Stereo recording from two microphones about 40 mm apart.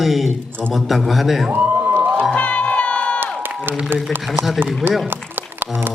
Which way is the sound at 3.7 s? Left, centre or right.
Right.